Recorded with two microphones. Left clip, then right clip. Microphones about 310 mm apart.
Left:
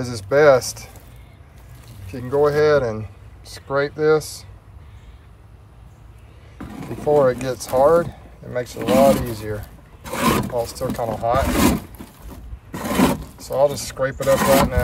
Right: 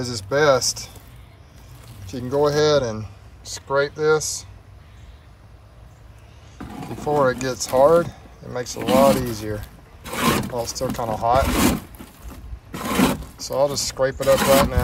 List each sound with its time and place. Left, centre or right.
0.0 s speech: centre
2.2 s speech: centre
6.6 s vehicle: centre
7.4 s speech: centre
10.0 s a sound: centre
10.6 s speech: centre
11.1 s a sound: centre